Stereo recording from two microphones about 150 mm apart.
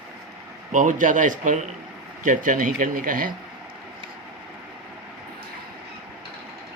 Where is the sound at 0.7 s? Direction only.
60° right (ahead or behind).